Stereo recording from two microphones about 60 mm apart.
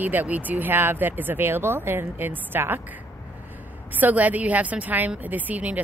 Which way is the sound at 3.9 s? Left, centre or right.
Right.